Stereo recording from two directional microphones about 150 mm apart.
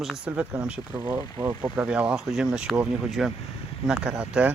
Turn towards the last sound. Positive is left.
turn(degrees=-10)  # may be behind; listen again after turning